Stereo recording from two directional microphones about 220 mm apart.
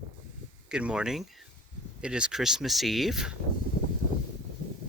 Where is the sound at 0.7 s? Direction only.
5° right (ahead or behind).